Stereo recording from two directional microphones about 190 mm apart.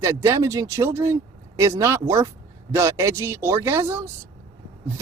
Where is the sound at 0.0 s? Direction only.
15° right (ahead or behind).